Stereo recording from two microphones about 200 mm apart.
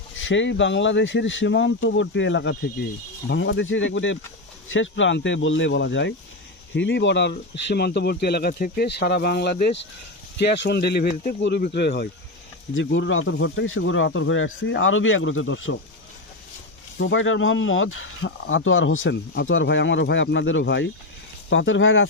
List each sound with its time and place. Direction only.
0.2 s speech: 70° left (ahead or behind); by 12.0 s 55° left (ahead or behind)
12.7 s speech: 70° left (ahead or behind)
17.0 s speech: 70° left (ahead or behind)